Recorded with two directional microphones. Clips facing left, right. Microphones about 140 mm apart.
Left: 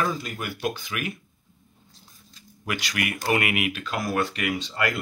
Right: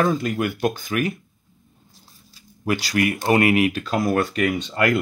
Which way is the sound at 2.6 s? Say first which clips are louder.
Right 8 dB; 35° right (ahead or behind).